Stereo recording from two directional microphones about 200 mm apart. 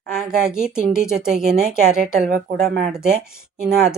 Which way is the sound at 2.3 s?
50° right (ahead or behind).